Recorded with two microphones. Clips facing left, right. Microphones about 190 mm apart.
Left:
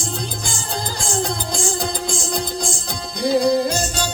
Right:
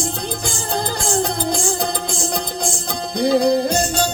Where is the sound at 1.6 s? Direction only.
60° right (ahead or behind).